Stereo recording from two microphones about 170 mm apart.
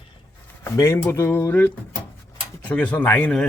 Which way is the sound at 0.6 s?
20° left (ahead or behind).